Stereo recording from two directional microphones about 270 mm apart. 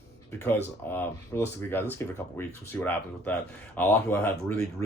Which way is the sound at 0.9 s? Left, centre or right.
Centre.